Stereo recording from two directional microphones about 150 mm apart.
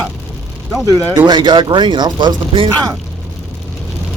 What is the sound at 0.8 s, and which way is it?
Speech, 25° right (ahead or behind).